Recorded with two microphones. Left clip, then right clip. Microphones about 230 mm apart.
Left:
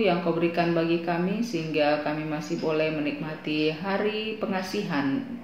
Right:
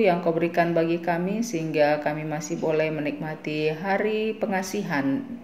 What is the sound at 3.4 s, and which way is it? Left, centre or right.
A woman's voice, right.